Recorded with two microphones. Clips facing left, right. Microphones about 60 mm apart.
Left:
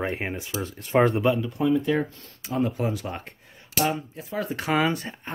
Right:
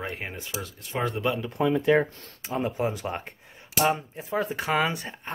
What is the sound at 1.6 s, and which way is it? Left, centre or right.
Speech, right.